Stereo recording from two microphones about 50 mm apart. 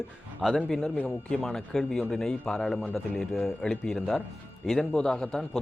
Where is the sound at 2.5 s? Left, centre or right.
Centre.